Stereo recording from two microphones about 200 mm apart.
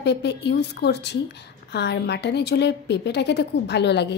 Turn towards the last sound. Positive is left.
turn(degrees=55)  # may be behind; listen again after turning